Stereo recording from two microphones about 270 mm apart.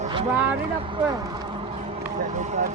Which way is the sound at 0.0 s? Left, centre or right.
Centre.